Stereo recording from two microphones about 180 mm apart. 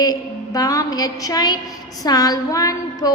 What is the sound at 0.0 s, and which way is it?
Music, 20° left (ahead or behind).